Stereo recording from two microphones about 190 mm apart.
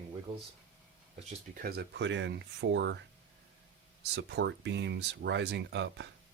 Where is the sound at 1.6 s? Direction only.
60° right (ahead or behind).